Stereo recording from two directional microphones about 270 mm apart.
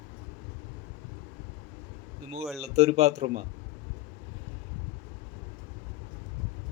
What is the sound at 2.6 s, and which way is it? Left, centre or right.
Speech, right.